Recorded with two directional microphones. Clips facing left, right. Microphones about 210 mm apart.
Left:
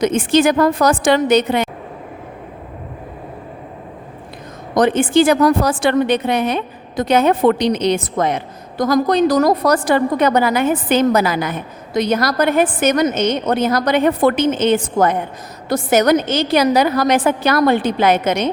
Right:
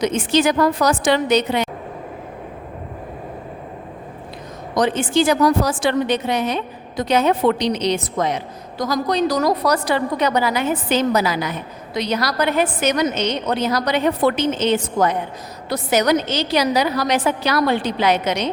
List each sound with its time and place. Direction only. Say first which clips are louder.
0.0 s a woman's voice: left 4 dB; 50° left (ahead or behind)
4.7 s a woman's voice: left 5 dB; 55° left (ahead or behind)